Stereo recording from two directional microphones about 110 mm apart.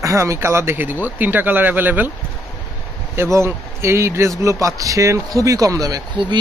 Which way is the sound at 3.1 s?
25° right (ahead or behind).